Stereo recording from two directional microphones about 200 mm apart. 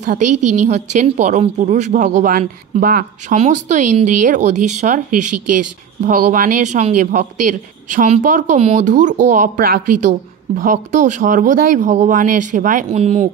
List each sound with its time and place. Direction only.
0.0 s speech: 40° right (ahead or behind)
3.3 s speech: 35° right (ahead or behind)